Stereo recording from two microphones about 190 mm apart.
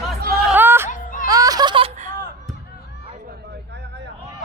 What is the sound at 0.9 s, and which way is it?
Music, 45° left (ahead or behind).